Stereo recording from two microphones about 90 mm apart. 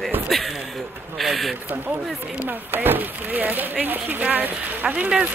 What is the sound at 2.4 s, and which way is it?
Speech, 20° right (ahead or behind).